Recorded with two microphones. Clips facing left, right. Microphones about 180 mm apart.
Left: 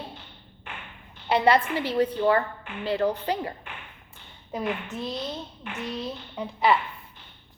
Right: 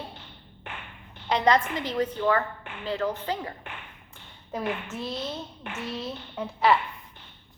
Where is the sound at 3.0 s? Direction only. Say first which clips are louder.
Left 4 dB; 30° left (ahead or behind).